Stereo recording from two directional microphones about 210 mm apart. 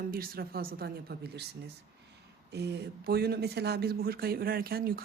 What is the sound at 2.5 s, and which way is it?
Speech, 50° right (ahead or behind).